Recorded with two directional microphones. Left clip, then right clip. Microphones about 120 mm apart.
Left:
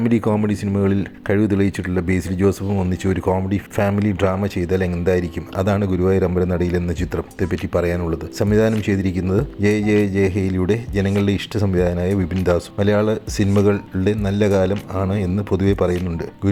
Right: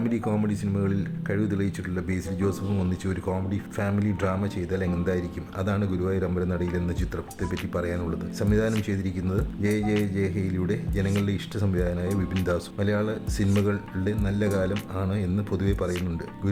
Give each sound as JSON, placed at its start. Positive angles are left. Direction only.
{"t": 0.0, "sound": "speech", "side_deg": 45}